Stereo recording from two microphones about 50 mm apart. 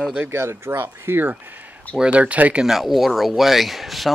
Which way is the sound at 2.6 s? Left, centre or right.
Centre.